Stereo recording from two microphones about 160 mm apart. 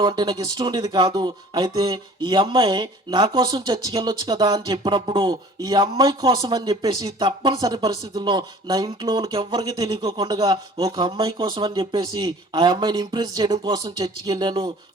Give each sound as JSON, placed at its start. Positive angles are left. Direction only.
{"t": 0.0, "sound": "speech", "side_deg": -25}